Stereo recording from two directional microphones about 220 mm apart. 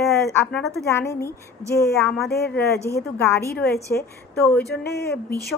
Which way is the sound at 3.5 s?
45° left (ahead or behind).